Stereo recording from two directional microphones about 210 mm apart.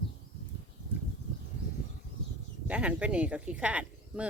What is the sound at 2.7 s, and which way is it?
Speech, 5° right (ahead or behind).